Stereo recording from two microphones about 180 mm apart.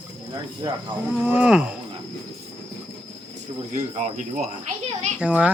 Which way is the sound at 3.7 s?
45° right (ahead or behind).